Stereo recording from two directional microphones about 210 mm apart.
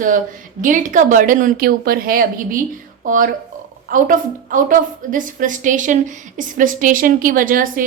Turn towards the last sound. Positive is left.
turn(degrees=-40)  # may be behind; listen again after turning